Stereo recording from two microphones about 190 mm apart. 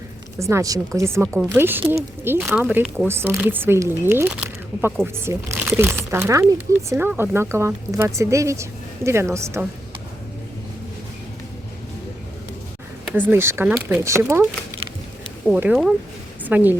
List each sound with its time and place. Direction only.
0.3 s speech: 15° right (ahead or behind)
13.1 s speech: 10° right (ahead or behind)
15.4 s speech: 5° right (ahead or behind)